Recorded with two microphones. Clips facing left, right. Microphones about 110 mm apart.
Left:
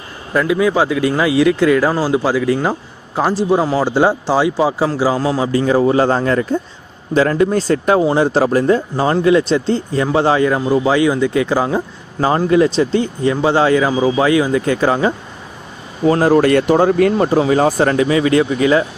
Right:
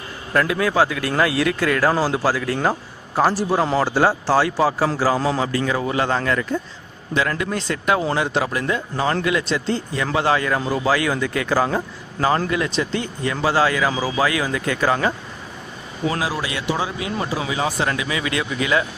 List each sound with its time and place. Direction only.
0.3 s speech: 10° left (ahead or behind)
3.8 s speech: 15° left (ahead or behind)
5.1 s speech: 5° left (ahead or behind)
5.5 s speech: 30° left (ahead or behind)
12.5 s speech: 30° left (ahead or behind)
16.0 s speech: 45° left (ahead or behind)